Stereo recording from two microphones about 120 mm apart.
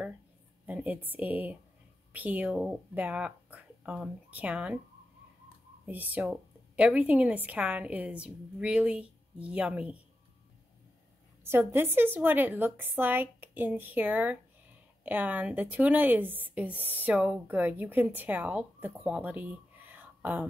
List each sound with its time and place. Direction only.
0.7 s speech: 15° right (ahead or behind)
5.9 s speech: 15° right (ahead or behind)
11.4 s speech: 20° right (ahead or behind)